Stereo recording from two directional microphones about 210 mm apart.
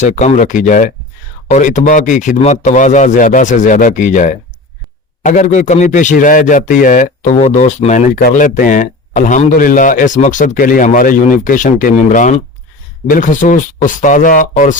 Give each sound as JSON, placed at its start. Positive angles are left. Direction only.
{"t": 0.0, "sound": "speech", "side_deg": 35}